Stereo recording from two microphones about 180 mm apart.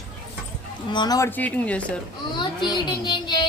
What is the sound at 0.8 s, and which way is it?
Speech, 25° left (ahead or behind).